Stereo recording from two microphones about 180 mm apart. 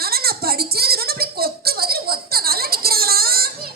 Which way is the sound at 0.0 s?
60° right (ahead or behind).